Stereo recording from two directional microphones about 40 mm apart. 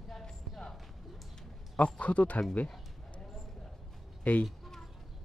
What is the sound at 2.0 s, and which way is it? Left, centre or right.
Speech, left.